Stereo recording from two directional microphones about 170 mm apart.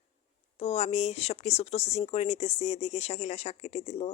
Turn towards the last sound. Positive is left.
turn(degrees=40)  # may be behind; listen again after turning